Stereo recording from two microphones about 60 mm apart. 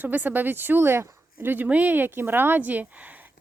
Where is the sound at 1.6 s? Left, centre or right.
Right.